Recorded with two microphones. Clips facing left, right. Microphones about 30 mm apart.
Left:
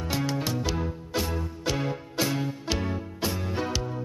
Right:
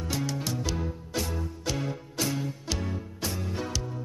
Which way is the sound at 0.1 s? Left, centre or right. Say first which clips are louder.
Left 3 dB; centre.